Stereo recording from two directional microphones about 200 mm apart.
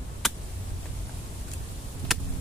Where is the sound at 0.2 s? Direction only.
Centre (ahead or behind).